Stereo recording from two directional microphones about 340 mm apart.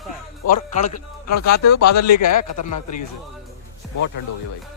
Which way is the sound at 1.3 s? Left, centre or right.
Left.